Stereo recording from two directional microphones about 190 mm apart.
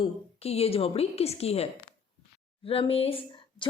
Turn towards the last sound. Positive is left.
turn(degrees=30)  # may be behind; listen again after turning